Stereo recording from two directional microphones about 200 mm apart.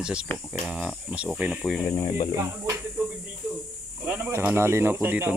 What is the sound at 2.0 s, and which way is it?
Speech, 25° left (ahead or behind).